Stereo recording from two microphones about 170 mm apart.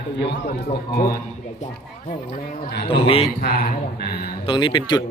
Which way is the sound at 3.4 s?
60° left (ahead or behind).